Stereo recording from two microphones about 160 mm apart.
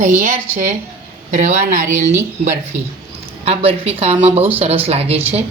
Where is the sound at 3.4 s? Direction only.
40° right (ahead or behind).